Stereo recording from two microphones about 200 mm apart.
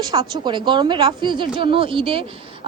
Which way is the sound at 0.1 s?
20° right (ahead or behind).